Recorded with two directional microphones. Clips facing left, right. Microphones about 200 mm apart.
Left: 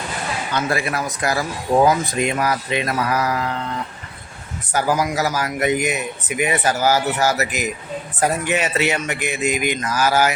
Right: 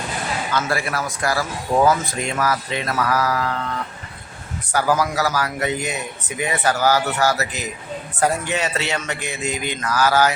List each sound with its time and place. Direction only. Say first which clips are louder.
0.5 s speech: left 2 dB; 20° left (ahead or behind)
4.7 s a man's voice: even; 15° left (ahead or behind)